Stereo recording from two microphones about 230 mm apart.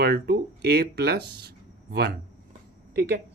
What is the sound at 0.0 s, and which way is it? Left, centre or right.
Speech, right.